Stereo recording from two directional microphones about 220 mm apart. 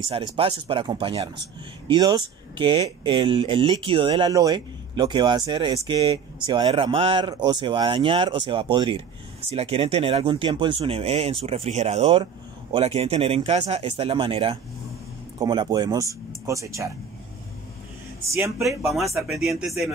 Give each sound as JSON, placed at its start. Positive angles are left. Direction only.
{"t": 0.0, "sound": "speech", "side_deg": -25}
{"t": 18.6, "sound": "speech", "side_deg": 0}